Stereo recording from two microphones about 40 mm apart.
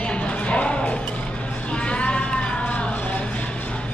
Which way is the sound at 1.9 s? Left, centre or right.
Left.